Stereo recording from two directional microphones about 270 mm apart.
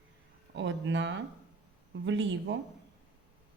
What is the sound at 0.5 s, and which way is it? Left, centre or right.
A woman's voice, right.